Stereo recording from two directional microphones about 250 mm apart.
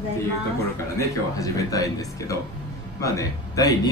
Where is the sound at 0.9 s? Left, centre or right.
Centre.